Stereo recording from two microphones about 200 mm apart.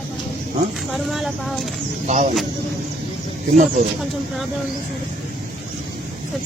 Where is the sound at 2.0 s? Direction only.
35° right (ahead or behind).